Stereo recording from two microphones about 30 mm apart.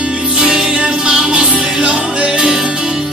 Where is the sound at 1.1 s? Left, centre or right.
Right.